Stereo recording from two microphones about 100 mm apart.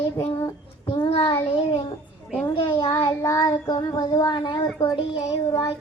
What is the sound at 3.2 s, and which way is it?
Child singing, 35° left (ahead or behind).